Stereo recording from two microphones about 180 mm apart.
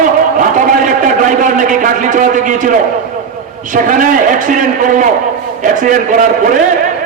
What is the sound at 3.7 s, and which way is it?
A man's voice, 45° right (ahead or behind).